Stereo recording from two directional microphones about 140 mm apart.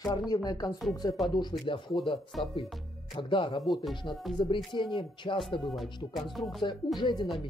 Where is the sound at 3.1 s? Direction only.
35° left (ahead or behind).